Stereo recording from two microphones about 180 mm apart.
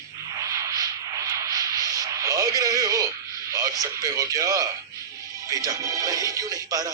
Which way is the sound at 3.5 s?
20° right (ahead or behind).